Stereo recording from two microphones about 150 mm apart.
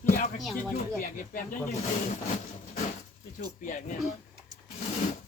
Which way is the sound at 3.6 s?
65° left (ahead or behind).